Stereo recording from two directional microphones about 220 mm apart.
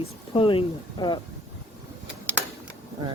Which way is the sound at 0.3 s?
25° left (ahead or behind).